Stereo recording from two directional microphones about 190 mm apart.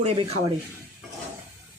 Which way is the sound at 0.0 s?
30° right (ahead or behind).